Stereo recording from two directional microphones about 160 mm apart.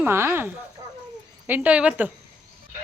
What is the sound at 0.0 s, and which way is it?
Speech, 15° right (ahead or behind).